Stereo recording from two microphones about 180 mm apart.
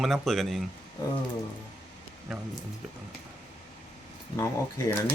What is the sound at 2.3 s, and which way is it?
Speech, centre (ahead or behind).